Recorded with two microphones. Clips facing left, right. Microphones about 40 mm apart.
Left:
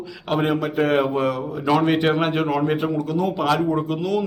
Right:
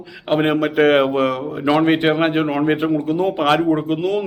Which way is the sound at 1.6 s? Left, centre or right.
Right.